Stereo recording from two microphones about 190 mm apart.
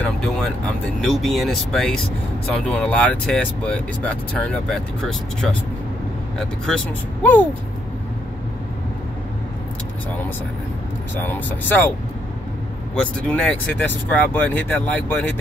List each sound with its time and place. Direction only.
0.0 s music: 5° left (ahead or behind)
1.0 s speech: centre (ahead or behind)
11.1 s speech: 10° left (ahead or behind)
12.9 s speech: 5° left (ahead or behind)